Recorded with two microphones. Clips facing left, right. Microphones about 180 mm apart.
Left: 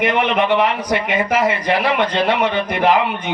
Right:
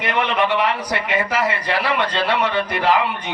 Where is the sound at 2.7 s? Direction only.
20° left (ahead or behind).